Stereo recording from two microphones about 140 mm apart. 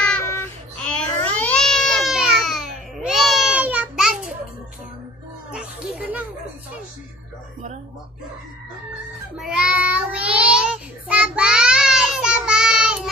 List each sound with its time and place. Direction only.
0.2 s child singing: 20° left (ahead or behind)
1.2 s cat: 10° left (ahead or behind)
3.5 s a sound: 10° right (ahead or behind)
5.5 s music: 10° right (ahead or behind)
9.4 s child singing: 5° right (ahead or behind)